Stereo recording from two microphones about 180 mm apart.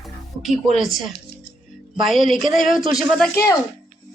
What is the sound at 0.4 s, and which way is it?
Speech, centre (ahead or behind).